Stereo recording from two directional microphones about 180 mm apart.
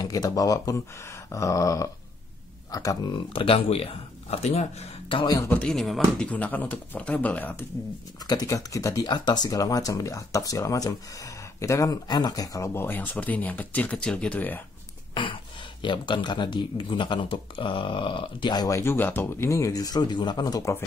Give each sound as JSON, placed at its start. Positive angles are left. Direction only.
{"t": 0.0, "sound": "speech", "side_deg": 20}
{"t": 3.3, "sound": "speech", "side_deg": 30}
{"t": 5.2, "sound": "speech", "side_deg": 20}
{"t": 5.5, "sound": "speech", "side_deg": 5}
{"t": 8.2, "sound": "speech", "side_deg": 20}
{"t": 15.8, "sound": "speech", "side_deg": 25}